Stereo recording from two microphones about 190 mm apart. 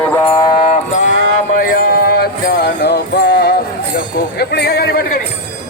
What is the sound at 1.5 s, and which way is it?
Music, 45° left (ahead or behind).